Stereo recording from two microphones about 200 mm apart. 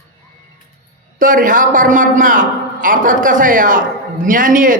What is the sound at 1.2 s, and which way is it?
A man's voice, 40° right (ahead or behind).